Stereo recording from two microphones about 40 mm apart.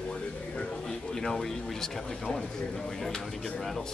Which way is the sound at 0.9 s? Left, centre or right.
Centre.